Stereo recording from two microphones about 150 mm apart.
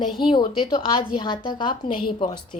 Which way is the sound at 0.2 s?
35° left (ahead or behind).